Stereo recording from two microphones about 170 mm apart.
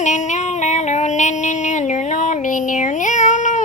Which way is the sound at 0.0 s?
45° left (ahead or behind).